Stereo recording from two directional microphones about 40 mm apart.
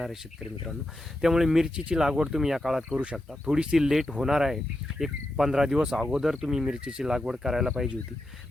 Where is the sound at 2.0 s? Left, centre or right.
Centre.